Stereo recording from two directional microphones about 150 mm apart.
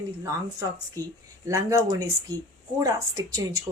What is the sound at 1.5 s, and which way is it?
Speech, 20° right (ahead or behind).